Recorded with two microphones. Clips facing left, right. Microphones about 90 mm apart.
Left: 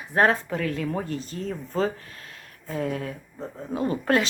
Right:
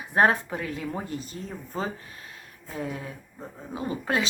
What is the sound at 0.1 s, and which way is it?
Speech, 15° right (ahead or behind).